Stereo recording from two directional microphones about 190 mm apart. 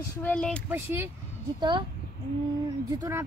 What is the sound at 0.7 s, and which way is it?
Speech, 10° right (ahead or behind).